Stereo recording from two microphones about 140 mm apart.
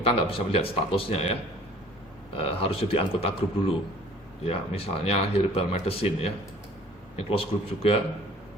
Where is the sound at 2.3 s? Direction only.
40° left (ahead or behind).